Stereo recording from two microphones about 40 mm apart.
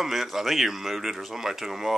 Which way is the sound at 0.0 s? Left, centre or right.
Centre.